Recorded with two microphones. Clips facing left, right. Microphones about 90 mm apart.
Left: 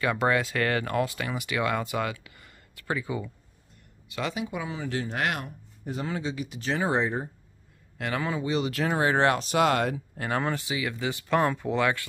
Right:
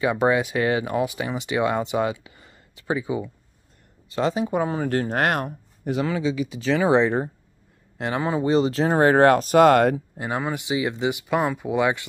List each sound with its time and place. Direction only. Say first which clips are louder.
0.0 s speech: right 5 dB; 20° right (ahead or behind)
4.1 s speech: right 9 dB; 35° right (ahead or behind); by 5.5 s 50° right (ahead or behind)
5.9 s speech: right 8 dB; 75° right (ahead or behind)
8.0 s speech: right 6 dB; 25° right (ahead or behind); by 10.0 s 50° right (ahead or behind)
10.1 s speech: right 2 dB; 15° right (ahead or behind)